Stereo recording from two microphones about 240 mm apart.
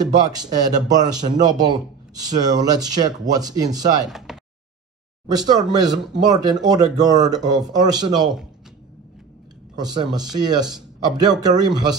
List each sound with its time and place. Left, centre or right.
0.0 s speech: centre
4.3 s a sound: centre
5.3 s speech: centre
9.8 s speech: centre